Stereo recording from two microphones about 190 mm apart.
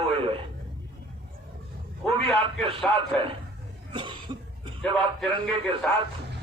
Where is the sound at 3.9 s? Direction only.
25° right (ahead or behind).